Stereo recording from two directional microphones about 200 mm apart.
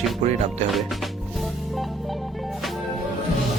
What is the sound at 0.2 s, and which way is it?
Music, 35° right (ahead or behind).